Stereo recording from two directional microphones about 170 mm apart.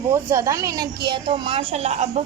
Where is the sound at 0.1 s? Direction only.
15° right (ahead or behind).